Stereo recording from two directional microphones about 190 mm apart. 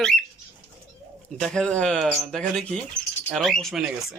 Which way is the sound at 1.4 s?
5° left (ahead or behind).